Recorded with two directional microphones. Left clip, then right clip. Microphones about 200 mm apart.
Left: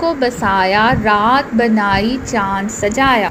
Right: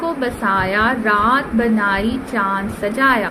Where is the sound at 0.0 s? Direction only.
25° left (ahead or behind).